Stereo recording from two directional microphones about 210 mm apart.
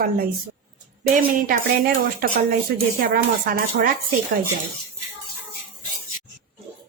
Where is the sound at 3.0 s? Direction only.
45° right (ahead or behind).